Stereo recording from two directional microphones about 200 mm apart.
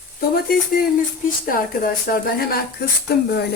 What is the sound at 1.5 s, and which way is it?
Speech, 45° left (ahead or behind).